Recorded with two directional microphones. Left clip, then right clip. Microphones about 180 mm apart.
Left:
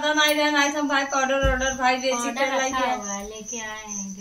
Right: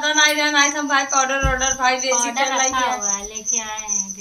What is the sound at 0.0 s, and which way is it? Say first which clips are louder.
A man's voice: right 4 dB; 30° left (ahead or behind).